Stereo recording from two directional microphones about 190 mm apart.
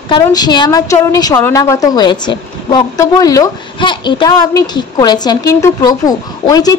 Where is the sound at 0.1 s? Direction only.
20° left (ahead or behind).